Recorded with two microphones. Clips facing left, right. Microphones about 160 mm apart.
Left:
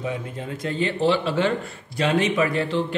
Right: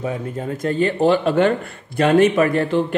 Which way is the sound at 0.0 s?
45° right (ahead or behind).